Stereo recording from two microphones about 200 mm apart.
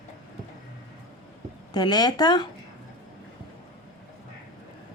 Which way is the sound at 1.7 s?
20° left (ahead or behind).